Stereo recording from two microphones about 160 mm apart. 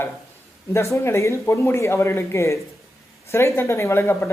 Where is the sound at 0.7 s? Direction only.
15° left (ahead or behind).